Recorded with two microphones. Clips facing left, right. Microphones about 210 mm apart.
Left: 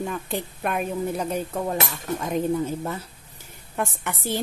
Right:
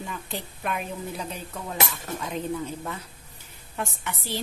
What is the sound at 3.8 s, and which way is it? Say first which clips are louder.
Speech: left 5 dB; 50° left (ahead or behind).